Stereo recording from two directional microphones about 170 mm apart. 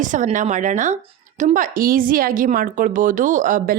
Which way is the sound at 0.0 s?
45° right (ahead or behind).